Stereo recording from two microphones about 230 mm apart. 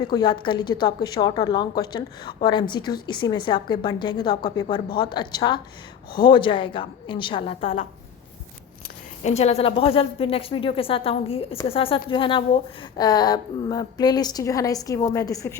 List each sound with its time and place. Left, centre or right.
0.1 s a woman's voice: centre
9.2 s a woman's voice: left